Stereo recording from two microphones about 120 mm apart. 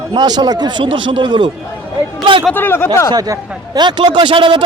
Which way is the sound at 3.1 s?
30° right (ahead or behind).